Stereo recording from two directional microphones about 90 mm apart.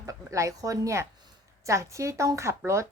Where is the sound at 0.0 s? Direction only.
35° right (ahead or behind).